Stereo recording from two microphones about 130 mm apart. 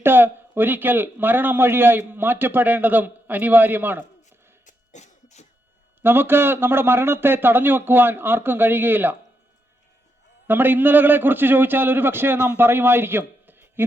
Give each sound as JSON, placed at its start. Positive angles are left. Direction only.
{"t": 0.0, "sound": "a man's voice", "side_deg": -15}
{"t": 4.6, "sound": "cough", "side_deg": 65}
{"t": 6.0, "sound": "a man's voice", "side_deg": -15}
{"t": 10.4, "sound": "a man's voice", "side_deg": -15}